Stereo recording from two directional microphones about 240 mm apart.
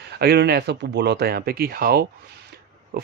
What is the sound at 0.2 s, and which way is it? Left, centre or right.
Speech, right.